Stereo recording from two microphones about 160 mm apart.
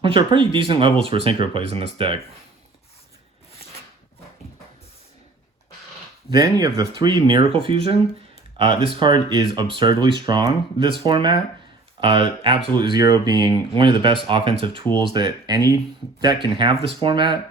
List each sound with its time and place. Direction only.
0.0 s speech: 30° right (ahead or behind)
6.3 s speech: 25° right (ahead or behind)